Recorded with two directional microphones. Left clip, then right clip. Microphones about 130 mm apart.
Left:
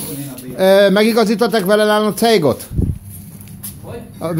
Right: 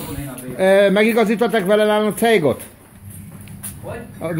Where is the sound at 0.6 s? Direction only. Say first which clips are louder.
Left 3 dB; 25° left (ahead or behind).